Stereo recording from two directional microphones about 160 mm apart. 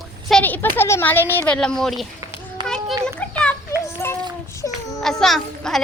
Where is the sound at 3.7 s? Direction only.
15° left (ahead or behind).